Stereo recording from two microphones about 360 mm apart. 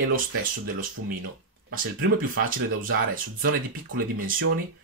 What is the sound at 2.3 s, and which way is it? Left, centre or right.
Speech, right.